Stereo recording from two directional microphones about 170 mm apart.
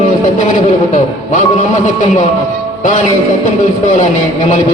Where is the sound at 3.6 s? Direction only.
45° left (ahead or behind).